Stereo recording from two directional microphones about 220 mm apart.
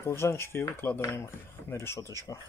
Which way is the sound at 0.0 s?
10° left (ahead or behind).